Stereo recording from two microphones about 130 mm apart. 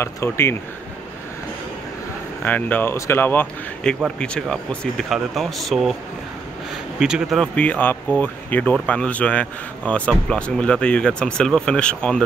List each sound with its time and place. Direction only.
0.0 s speech: 20° left (ahead or behind)
2.4 s speech: 15° left (ahead or behind)
3.9 s speech: 5° left (ahead or behind)
7.0 s speech: 5° right (ahead or behind)
7.5 s speech: 10° left (ahead or behind)